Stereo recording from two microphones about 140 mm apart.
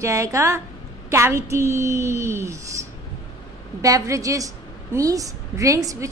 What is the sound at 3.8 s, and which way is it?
A woman's voice, 25° right (ahead or behind).